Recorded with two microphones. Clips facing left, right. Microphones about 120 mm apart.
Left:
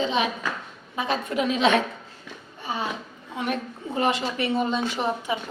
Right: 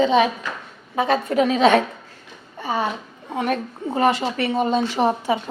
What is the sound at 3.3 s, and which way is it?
Speech, 55° right (ahead or behind).